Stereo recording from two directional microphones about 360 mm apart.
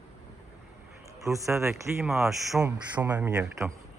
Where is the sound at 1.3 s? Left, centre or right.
Centre.